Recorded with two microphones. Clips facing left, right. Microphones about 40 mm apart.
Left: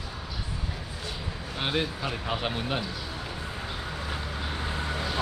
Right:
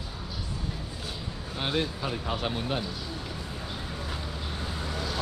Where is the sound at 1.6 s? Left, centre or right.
Centre.